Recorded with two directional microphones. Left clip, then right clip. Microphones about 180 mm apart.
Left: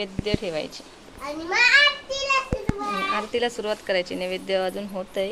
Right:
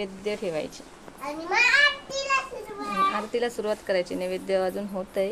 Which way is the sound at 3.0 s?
5° left (ahead or behind).